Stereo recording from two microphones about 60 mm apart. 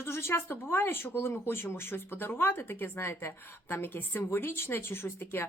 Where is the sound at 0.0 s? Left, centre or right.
Left.